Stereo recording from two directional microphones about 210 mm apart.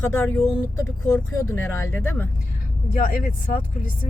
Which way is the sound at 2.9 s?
40° left (ahead or behind).